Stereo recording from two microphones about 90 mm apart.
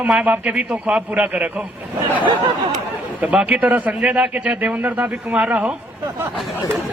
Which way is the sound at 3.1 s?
15° right (ahead or behind).